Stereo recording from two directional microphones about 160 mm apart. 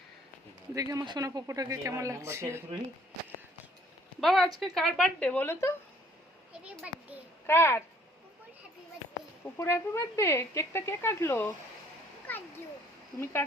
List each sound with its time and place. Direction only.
0.7 s speech: 20° right (ahead or behind)
4.2 s a woman's voice: centre (ahead or behind)
7.4 s speech: 15° left (ahead or behind)
9.6 s a woman's voice: 15° left (ahead or behind)
12.3 s a sound: 10° left (ahead or behind)
13.1 s a woman's voice: 15° left (ahead or behind)